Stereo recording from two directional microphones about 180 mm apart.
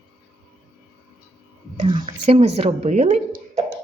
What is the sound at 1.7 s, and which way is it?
Speech, 30° right (ahead or behind).